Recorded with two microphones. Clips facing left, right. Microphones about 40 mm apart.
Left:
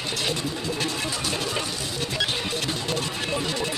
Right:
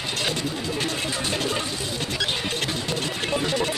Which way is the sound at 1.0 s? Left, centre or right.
Right.